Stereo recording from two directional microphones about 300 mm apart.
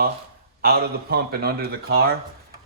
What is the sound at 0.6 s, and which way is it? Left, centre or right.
Speech, right.